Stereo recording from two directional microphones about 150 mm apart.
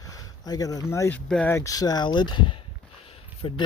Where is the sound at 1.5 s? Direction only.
20° left (ahead or behind); by 3.6 s 35° left (ahead or behind).